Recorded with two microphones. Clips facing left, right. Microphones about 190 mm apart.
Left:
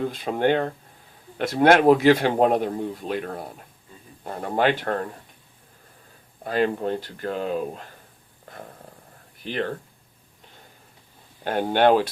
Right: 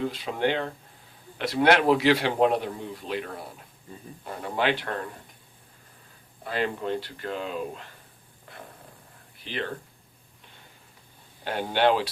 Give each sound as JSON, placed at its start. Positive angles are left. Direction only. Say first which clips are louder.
{"t": 0.0, "sound": "speech", "louder": "left 4 dB", "side_deg": 50}
{"t": 6.4, "sound": "speech", "louder": "left 6 dB", "side_deg": 40}
{"t": 9.4, "sound": "speech", "louder": "left 5 dB", "side_deg": 45}
{"t": 11.4, "sound": "speech", "louder": "left 5 dB", "side_deg": 50}